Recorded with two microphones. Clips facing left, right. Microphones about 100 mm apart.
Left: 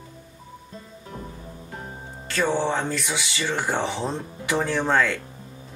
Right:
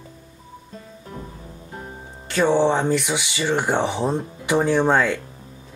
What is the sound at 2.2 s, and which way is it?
Speech, 15° right (ahead or behind).